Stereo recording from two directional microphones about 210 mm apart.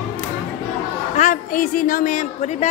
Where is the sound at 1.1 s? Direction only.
35° left (ahead or behind).